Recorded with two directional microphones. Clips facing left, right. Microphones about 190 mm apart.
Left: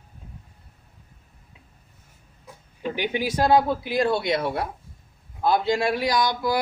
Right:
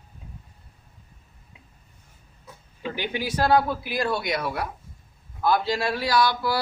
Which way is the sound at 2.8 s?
20° left (ahead or behind).